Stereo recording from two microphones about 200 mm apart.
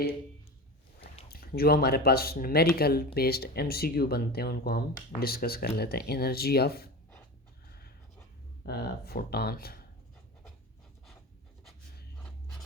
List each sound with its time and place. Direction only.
1.3 s speech: 50° left (ahead or behind)
8.6 s speech: 50° left (ahead or behind)